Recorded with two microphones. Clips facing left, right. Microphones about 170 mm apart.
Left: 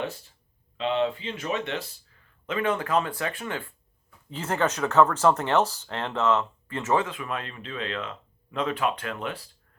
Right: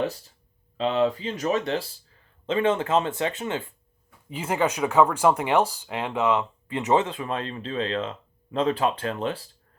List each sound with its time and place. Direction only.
0.8 s speech: 40° right (ahead or behind)